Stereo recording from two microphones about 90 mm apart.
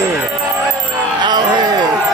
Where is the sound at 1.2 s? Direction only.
55° right (ahead or behind).